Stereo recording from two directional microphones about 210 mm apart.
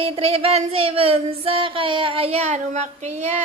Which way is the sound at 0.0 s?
30° right (ahead or behind).